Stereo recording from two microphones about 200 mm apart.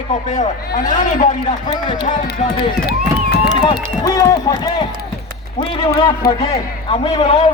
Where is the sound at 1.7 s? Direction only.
20° left (ahead or behind).